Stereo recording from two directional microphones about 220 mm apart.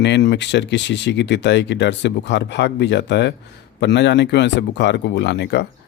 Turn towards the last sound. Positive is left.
turn(degrees=50)  # may be behind; listen again after turning